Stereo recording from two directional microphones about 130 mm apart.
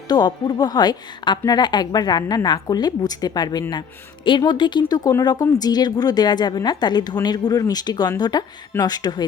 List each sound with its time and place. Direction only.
0.1 s speech: 35° left (ahead or behind)